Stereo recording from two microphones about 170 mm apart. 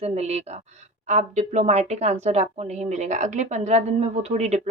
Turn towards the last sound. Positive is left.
turn(degrees=-40)  # may be behind; listen again after turning